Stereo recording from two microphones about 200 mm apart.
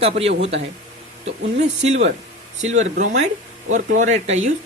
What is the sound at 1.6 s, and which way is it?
Speech, 35° right (ahead or behind).